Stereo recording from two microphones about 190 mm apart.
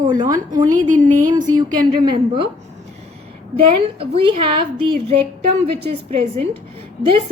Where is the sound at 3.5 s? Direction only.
30° right (ahead or behind).